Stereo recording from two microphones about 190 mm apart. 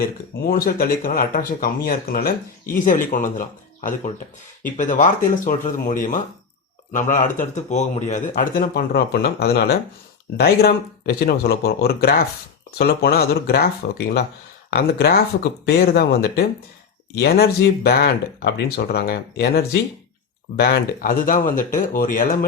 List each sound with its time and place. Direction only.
0.4 s speech: 50° left (ahead or behind)